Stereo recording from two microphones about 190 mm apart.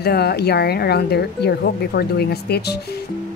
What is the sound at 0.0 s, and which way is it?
A woman's voice, 55° left (ahead or behind).